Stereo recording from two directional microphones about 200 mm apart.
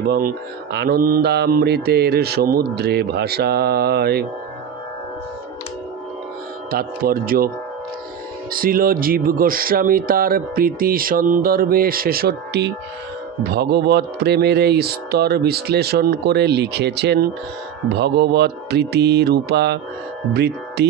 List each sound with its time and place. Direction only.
0.0 s speech: 50° right (ahead or behind)
6.7 s speech: 50° right (ahead or behind)